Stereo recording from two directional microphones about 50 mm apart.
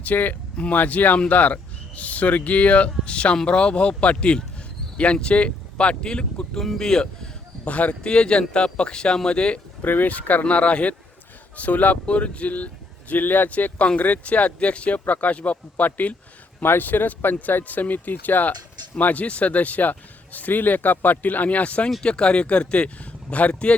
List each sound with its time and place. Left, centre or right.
0.0 s speech: left
0.5 s speech: left
0.8 s speech: left; by 7.1 s centre
7.6 s speech: left
8.1 s speech: centre
9.8 s speech: left